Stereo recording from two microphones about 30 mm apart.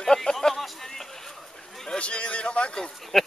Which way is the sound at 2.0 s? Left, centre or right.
Left.